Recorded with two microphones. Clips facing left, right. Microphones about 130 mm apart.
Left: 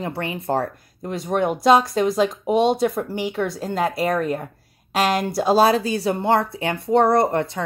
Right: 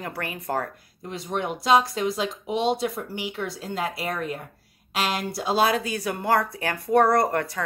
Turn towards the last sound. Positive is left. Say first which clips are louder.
# left 4 dB
turn(degrees=25)  # may be behind; listen again after turning